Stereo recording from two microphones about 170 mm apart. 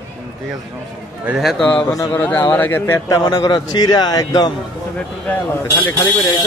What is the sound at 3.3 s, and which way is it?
Speech, 25° left (ahead or behind).